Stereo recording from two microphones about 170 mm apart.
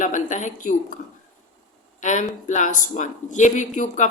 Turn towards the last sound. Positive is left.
turn(degrees=45)  # may be behind; listen again after turning